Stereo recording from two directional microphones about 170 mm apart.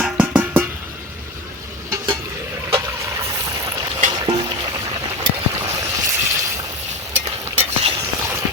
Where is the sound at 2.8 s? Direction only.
15° right (ahead or behind).